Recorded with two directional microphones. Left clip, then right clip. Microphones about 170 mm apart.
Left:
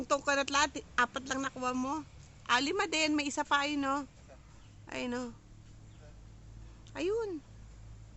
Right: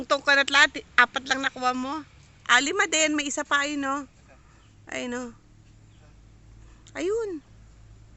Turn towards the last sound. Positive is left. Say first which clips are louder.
# right 6 dB
turn(degrees=-30)  # may be behind; listen again after turning